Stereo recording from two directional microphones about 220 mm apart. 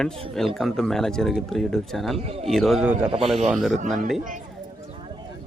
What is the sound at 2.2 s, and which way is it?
Speech, 30° right (ahead or behind).